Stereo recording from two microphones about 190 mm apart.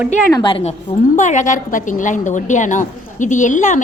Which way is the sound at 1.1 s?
40° left (ahead or behind).